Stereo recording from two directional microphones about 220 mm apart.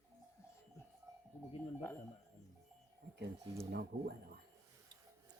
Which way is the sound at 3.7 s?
45° right (ahead or behind).